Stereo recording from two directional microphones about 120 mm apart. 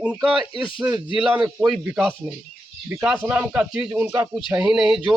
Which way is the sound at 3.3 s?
10° right (ahead or behind).